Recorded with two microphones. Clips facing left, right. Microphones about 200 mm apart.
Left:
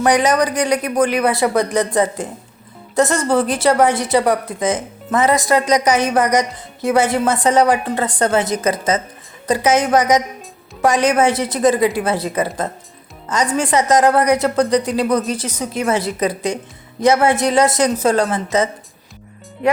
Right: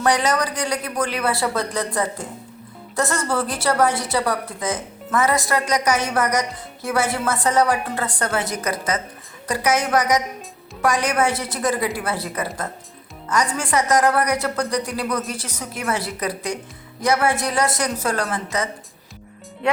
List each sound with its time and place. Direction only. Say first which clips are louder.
0.0 s a woman's voice: left 5 dB; 15° left (ahead or behind)